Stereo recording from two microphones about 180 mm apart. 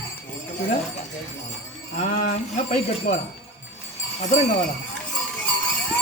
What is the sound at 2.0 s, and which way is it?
Speech, 40° left (ahead or behind).